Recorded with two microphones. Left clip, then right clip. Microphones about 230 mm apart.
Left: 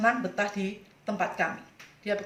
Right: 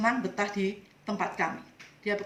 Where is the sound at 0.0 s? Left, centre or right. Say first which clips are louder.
Left 2 dB; centre.